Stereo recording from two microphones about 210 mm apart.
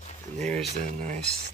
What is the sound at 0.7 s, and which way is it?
Speech, 35° right (ahead or behind).